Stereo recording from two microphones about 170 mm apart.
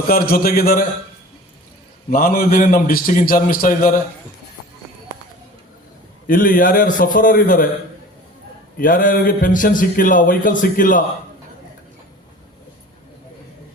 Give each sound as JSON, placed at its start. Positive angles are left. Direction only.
{"t": 0.1, "sound": "a man's voice", "side_deg": 60}
{"t": 2.0, "sound": "a man's voice", "side_deg": 60}
{"t": 6.2, "sound": "speech", "side_deg": 55}
{"t": 8.8, "sound": "speech", "side_deg": 55}